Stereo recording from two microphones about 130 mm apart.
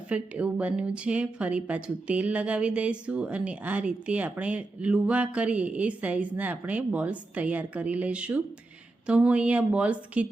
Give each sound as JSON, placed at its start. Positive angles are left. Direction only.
{"t": 0.1, "sound": "speech", "side_deg": -10}